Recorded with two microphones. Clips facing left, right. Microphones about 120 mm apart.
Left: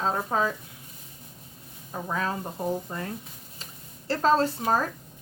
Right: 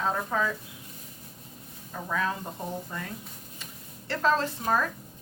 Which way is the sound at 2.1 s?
30° left (ahead or behind).